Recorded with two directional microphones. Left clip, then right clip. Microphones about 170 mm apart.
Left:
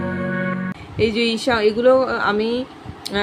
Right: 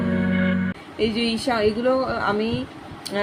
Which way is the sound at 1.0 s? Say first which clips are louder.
Left 4 dB; 25° left (ahead or behind).